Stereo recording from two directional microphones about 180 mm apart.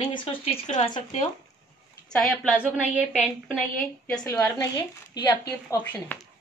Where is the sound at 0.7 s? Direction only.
40° left (ahead or behind).